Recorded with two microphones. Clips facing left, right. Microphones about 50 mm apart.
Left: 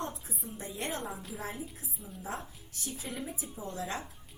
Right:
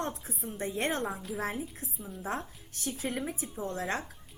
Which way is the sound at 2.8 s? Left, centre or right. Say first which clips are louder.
Right 5 dB; right.